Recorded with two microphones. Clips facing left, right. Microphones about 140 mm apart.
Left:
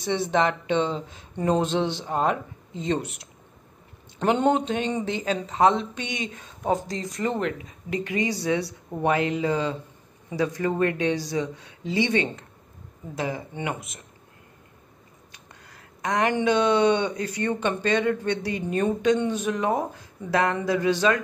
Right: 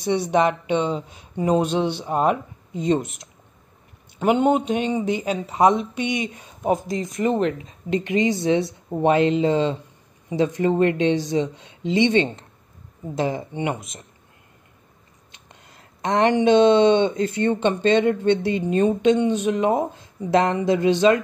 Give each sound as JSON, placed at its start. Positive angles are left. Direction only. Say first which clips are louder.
{"t": 0.0, "sound": "speech", "louder": "right 4 dB", "side_deg": -15}
{"t": 4.2, "sound": "speech", "louder": "right 3 dB", "side_deg": -10}
{"t": 15.3, "sound": "speech", "louder": "right 2 dB", "side_deg": -25}